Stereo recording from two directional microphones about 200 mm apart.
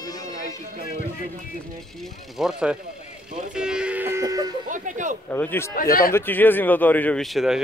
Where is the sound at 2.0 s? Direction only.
Centre (ahead or behind).